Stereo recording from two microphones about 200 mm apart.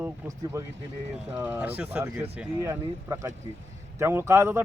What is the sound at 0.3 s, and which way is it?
A man's voice, 15° right (ahead or behind).